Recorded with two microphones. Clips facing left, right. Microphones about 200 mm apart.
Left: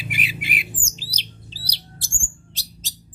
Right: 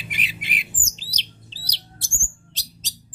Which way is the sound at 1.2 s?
10° left (ahead or behind).